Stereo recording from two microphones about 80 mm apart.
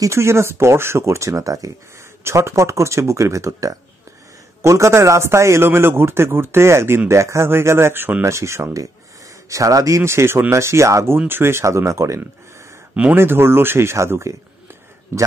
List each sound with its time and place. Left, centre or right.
0.0 s a man's voice: right
11.1 s a man's voice: right